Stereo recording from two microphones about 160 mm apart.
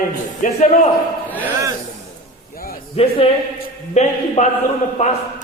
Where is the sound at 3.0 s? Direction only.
40° left (ahead or behind).